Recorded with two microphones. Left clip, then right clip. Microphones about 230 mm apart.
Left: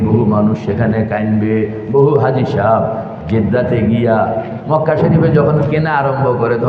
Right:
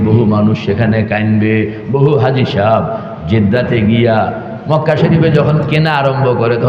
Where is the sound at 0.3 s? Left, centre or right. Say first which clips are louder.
Right 1 dB; right.